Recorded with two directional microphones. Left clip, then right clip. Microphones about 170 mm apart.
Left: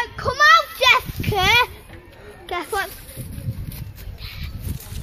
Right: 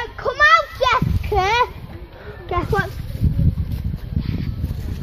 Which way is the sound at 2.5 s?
5° right (ahead or behind).